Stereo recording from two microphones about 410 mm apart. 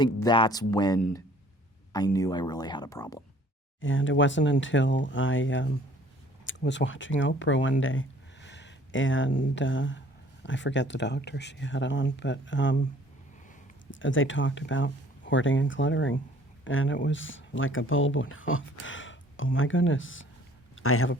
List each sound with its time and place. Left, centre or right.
0.0 s speech: centre
3.8 s speech: left
14.0 s speech: left